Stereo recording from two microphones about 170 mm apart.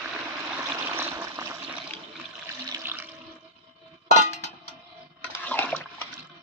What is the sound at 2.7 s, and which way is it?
Water, 15° right (ahead or behind).